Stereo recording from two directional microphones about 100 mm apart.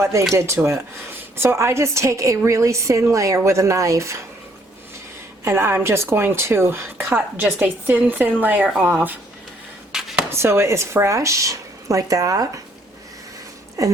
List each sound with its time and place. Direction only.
0.0 s a woman's voice: 30° right (ahead or behind)
5.5 s a woman's voice: 25° right (ahead or behind)
9.9 s a sound: 5° right (ahead or behind)
10.3 s a woman's voice: 25° right (ahead or behind)
13.8 s speech: 35° right (ahead or behind)